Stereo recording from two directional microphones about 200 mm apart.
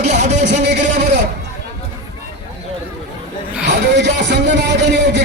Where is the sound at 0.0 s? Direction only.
35° right (ahead or behind).